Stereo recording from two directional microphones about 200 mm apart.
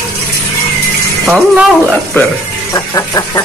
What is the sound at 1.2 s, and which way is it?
Speech, 5° right (ahead or behind).